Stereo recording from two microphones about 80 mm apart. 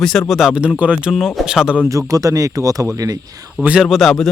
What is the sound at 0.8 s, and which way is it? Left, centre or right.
Speech, centre.